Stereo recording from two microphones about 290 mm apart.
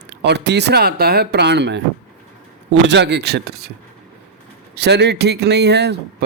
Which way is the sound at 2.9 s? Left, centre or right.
Right.